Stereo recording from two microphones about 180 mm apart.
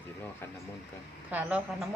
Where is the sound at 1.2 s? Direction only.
10° right (ahead or behind).